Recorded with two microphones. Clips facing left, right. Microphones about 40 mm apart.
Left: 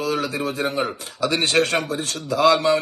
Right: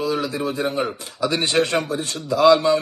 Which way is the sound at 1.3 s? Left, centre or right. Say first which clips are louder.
Left 2 dB; left.